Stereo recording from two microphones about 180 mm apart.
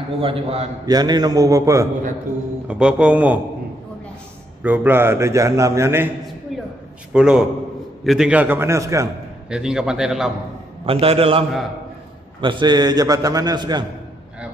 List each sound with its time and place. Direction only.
0.2 s a man's voice: 30° right (ahead or behind)
0.8 s a man's voice: 20° right (ahead or behind)
2.7 s a man's voice: 5° right (ahead or behind)
4.6 s a man's voice: 10° right (ahead or behind)
6.5 s a sound: centre (ahead or behind)
7.1 s a man's voice: 5° right (ahead or behind)
9.5 s a man's voice: 5° right (ahead or behind)
10.9 s a man's voice: 30° right (ahead or behind)